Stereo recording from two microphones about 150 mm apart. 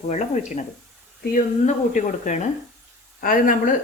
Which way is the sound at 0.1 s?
55° left (ahead or behind).